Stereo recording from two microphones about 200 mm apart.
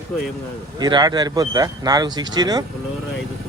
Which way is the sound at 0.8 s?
20° right (ahead or behind).